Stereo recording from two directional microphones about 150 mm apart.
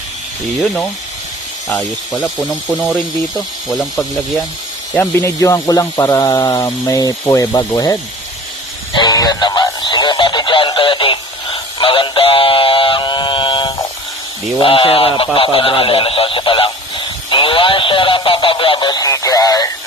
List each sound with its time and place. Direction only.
2.2 s speech: centre (ahead or behind)
4.9 s speech: 20° left (ahead or behind)
8.9 s a sound: 30° left (ahead or behind)
14.6 s speech: 35° left (ahead or behind)
15.3 s radio: 35° left (ahead or behind)